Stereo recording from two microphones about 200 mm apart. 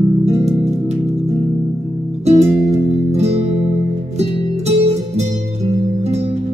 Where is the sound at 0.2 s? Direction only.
35° right (ahead or behind).